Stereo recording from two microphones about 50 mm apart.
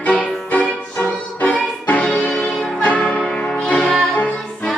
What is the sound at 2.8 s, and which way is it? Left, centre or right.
Church bell, left.